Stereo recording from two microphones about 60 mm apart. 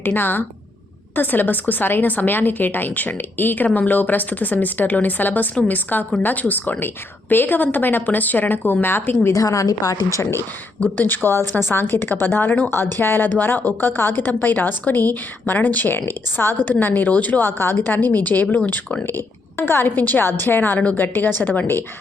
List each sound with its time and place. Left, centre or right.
0.0 s a woman's voice: left
9.2 s a woman's voice: left
10.9 s a woman's voice: left
16.0 s a woman's voice: left